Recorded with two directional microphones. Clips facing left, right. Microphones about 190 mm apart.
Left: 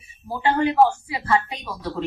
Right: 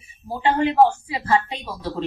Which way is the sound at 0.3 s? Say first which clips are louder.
Right 1 dB; 25° right (ahead or behind).